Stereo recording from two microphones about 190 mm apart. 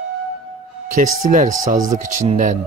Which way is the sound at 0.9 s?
45° right (ahead or behind).